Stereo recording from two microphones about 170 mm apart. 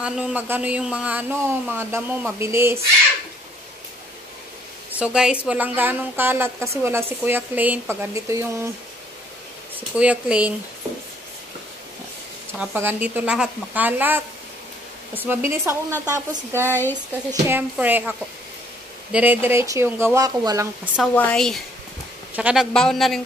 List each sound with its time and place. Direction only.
0.0 s a woman's voice: 10° right (ahead or behind)
4.9 s a woman's voice: 5° right (ahead or behind)
9.8 s a woman's voice: 10° right (ahead or behind)
12.5 s a woman's voice: 10° right (ahead or behind)
19.1 s a woman's voice: 10° right (ahead or behind)
20.9 s speech: 10° left (ahead or behind)